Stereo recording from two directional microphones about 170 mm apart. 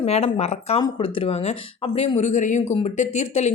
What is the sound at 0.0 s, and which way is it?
A woman's voice, 35° left (ahead or behind).